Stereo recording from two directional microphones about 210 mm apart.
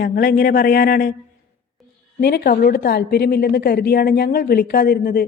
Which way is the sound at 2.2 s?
50° left (ahead or behind).